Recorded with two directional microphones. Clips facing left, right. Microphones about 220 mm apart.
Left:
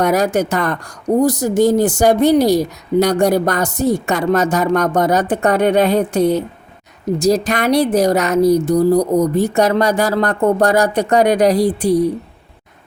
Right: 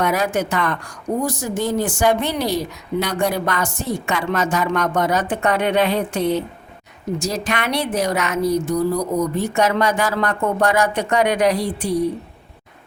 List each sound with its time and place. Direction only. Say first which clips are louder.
0.0 s a woman's voice: left 5 dB; 40° left (ahead or behind)